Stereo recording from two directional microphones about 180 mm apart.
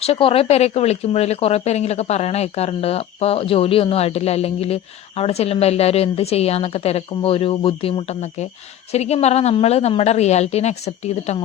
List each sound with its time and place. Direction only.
0.0 s speech: 30° left (ahead or behind)